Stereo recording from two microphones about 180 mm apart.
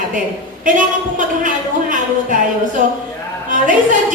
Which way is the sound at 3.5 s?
45° right (ahead or behind).